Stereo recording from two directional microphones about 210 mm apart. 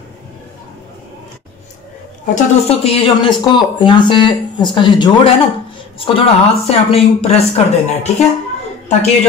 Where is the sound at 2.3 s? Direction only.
30° left (ahead or behind).